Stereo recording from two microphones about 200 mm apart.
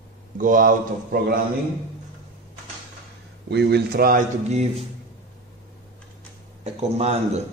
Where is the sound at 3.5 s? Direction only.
55° right (ahead or behind).